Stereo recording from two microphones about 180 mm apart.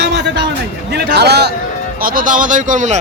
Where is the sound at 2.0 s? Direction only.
50° right (ahead or behind).